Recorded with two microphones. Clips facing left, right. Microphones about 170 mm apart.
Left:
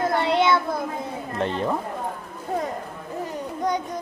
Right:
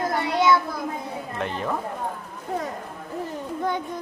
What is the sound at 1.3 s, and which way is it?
Speech, 30° left (ahead or behind).